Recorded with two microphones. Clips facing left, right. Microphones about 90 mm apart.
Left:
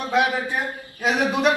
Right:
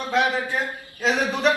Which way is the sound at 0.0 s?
15° left (ahead or behind).